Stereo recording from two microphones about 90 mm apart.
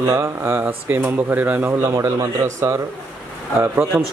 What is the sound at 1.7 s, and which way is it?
Speech, 30° right (ahead or behind).